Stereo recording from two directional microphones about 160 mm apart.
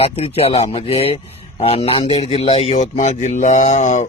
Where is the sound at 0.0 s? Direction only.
40° left (ahead or behind).